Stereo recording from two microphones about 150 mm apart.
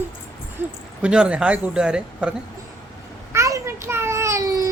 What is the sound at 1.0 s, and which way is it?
Speech, 5° right (ahead or behind).